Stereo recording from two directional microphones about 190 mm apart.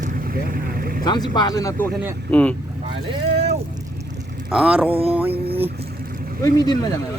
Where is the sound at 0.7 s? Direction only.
50° right (ahead or behind).